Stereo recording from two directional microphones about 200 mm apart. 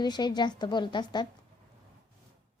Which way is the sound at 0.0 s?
20° left (ahead or behind).